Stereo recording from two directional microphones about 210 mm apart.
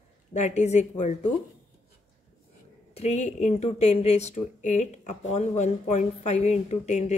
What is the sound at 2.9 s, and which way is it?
A woman's voice, 30° left (ahead or behind).